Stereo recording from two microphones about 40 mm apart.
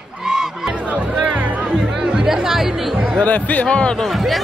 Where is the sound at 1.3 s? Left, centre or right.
Right.